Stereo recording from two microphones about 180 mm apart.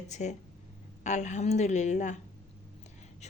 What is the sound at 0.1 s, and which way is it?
Speech, 40° left (ahead or behind).